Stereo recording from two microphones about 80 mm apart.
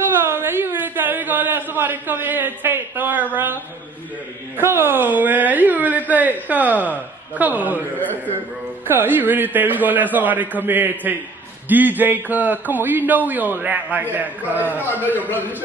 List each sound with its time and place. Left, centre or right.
0.3 s a man's voice: right
4.6 s a woman's voice: right
8.0 s a man's voice: left
8.8 s a woman's voice: right